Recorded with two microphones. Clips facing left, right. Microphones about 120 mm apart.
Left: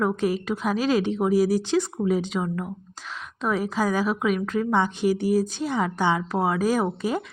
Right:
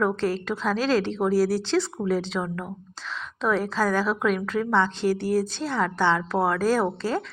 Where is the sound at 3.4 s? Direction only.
10° left (ahead or behind).